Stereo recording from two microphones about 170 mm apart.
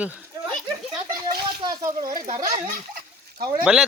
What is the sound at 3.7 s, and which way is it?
Speech, 5° right (ahead or behind).